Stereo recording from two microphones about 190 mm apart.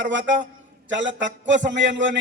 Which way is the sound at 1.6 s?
75° right (ahead or behind).